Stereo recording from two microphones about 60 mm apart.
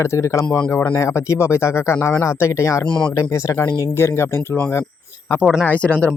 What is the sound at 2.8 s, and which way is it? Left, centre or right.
Speech, centre.